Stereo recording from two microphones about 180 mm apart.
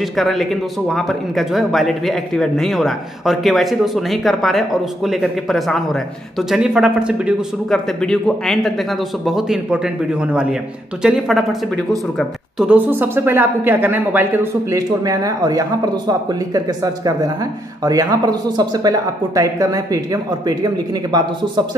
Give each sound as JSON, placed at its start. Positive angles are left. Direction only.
{"t": 0.0, "sound": "a woman's voice", "side_deg": 0}